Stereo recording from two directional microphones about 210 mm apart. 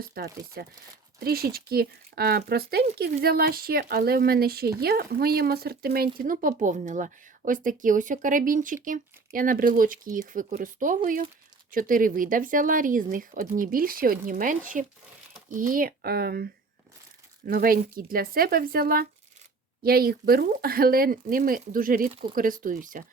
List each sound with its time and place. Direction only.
0.0 s speech: 45° right (ahead or behind)